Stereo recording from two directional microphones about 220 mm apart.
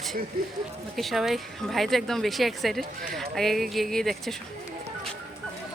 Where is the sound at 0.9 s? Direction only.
Centre (ahead or behind).